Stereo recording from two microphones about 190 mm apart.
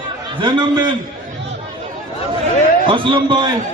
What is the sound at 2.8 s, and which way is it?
Speech, 25° right (ahead or behind).